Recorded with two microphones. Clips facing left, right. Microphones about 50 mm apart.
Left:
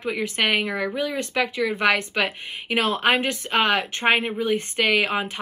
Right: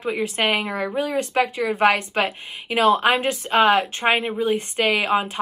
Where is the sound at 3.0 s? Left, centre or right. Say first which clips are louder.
Right 1 dB; left.